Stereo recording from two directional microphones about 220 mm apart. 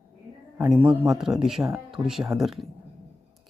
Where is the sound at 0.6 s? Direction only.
5° right (ahead or behind).